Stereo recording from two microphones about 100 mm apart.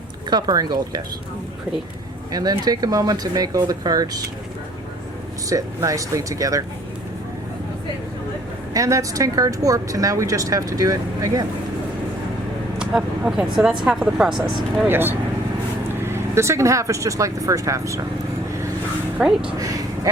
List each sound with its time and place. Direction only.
0.3 s speech: 45° right (ahead or behind)
2.3 s speech: 40° right (ahead or behind)
5.5 s speech: 35° right (ahead or behind)
8.7 s speech: 35° right (ahead or behind)
12.8 s speech: 10° right (ahead or behind)
14.8 s speech: 20° right (ahead or behind)
19.5 s speech: 35° right (ahead or behind)